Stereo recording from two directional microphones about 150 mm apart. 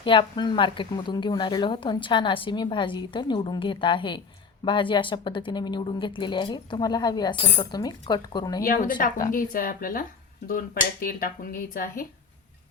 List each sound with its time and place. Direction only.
0.0 s speech: 35° left (ahead or behind)
8.6 s speech: 65° left (ahead or behind)